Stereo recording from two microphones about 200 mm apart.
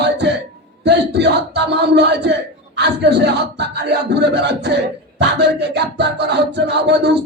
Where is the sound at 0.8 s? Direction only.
60° right (ahead or behind).